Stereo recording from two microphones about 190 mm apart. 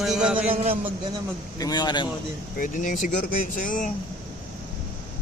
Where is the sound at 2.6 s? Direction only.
45° left (ahead or behind).